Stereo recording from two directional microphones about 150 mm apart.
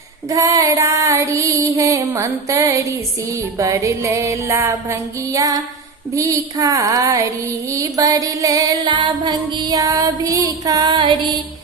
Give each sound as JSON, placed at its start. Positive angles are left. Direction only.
{"t": 0.3, "sound": "music", "side_deg": -25}